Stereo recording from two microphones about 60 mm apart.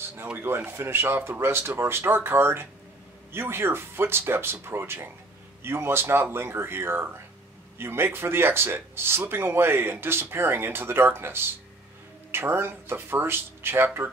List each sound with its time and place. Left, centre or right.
0.4 s speech: right